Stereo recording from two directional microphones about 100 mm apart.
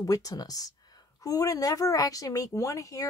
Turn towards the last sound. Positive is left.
turn(degrees=35)  # may be behind; listen again after turning